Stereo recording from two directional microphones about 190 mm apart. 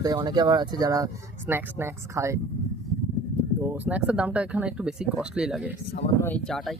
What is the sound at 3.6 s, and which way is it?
Speech, 10° right (ahead or behind).